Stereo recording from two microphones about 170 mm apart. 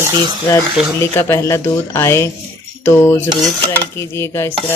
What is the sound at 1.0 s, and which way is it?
Speech, 15° left (ahead or behind).